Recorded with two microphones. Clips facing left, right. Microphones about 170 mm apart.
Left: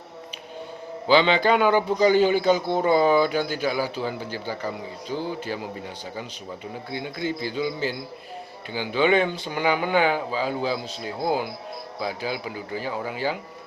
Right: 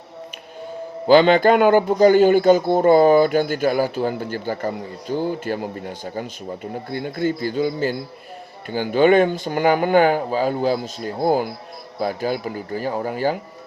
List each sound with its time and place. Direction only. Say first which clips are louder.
1.0 s a man's voice: right 6 dB; 45° right (ahead or behind)